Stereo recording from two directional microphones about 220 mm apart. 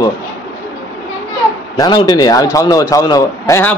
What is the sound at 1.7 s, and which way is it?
A man's voice, 20° left (ahead or behind).